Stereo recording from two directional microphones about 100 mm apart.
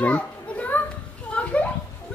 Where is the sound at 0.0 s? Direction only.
15° left (ahead or behind).